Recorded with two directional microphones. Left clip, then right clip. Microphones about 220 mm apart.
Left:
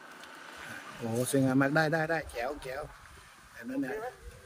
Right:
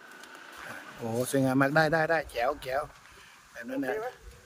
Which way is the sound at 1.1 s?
10° right (ahead or behind).